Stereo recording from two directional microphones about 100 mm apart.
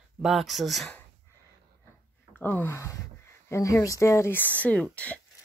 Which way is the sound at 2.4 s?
20° left (ahead or behind).